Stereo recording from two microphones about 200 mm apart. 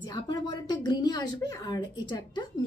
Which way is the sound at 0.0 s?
20° left (ahead or behind).